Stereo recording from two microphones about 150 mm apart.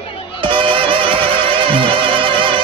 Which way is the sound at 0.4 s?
35° right (ahead or behind).